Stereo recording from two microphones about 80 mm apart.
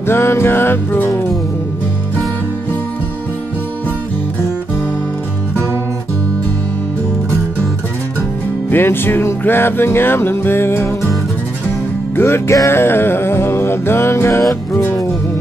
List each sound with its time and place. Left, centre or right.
0.0 s music: left
8.6 s music: left
12.2 s music: left